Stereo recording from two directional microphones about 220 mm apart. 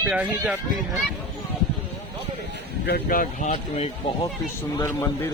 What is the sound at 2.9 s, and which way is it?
Speech, 40° left (ahead or behind).